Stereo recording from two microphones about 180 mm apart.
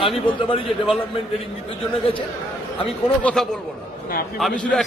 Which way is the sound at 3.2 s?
5° left (ahead or behind).